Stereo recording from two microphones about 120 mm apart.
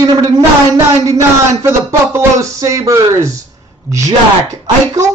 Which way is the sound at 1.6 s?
25° right (ahead or behind).